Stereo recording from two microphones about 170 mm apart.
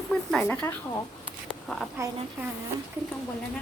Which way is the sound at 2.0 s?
15° right (ahead or behind).